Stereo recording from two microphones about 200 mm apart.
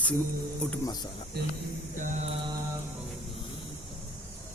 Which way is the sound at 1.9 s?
40° right (ahead or behind).